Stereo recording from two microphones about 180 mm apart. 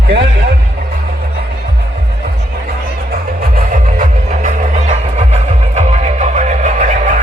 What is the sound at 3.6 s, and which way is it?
Music, 45° right (ahead or behind).